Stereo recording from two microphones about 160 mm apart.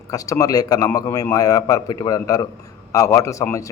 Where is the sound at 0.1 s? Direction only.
20° left (ahead or behind).